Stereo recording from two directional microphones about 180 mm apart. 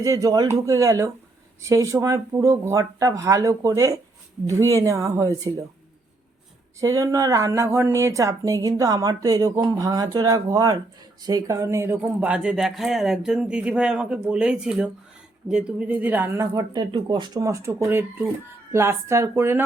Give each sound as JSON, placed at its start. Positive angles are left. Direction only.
{"t": 0.0, "sound": "speech", "side_deg": -20}
{"t": 6.7, "sound": "speech", "side_deg": -20}
{"t": 16.6, "sound": "speech", "side_deg": -25}